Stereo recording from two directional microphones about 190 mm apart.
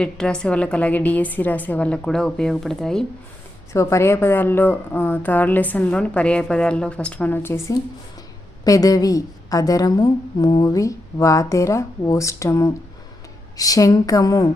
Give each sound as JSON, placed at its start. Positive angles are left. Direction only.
{"t": 0.0, "sound": "a woman's voice", "side_deg": 5}
{"t": 3.7, "sound": "a woman's voice", "side_deg": 15}